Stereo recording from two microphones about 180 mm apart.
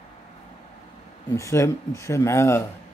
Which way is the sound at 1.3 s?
15° left (ahead or behind).